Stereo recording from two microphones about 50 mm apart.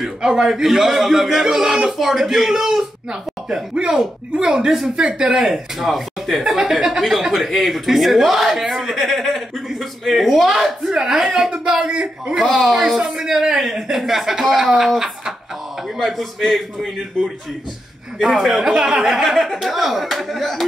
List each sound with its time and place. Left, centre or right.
0.0 s a man's voice: centre
5.4 s a man's voice: centre
6.4 s a man's voice: centre
12.4 s a man's voice: centre
12.7 s a man's voice: centre
16.0 s a man's voice: centre
18.2 s a man's voice: centre
18.7 s a man's voice: centre